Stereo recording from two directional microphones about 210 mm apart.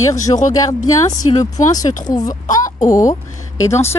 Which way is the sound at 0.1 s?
15° left (ahead or behind).